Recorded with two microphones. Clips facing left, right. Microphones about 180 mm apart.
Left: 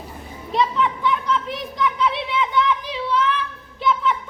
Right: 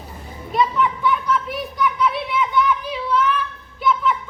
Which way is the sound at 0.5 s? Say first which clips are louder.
Right 1 dB; 25° left (ahead or behind).